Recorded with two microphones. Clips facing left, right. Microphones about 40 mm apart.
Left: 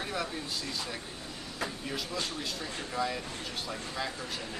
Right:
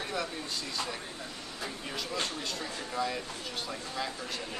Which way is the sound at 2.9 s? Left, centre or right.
Centre.